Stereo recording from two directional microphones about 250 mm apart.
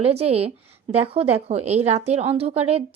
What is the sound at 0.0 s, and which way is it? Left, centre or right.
Speech, right.